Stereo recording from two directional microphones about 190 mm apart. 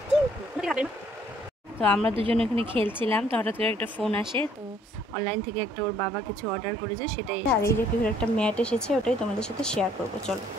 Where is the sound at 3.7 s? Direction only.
10° left (ahead or behind).